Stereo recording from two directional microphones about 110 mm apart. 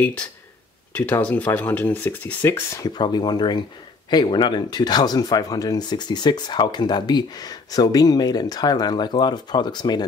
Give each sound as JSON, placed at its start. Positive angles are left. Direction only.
{"t": 0.9, "sound": "speech", "side_deg": 15}
{"t": 2.8, "sound": "speech", "side_deg": 40}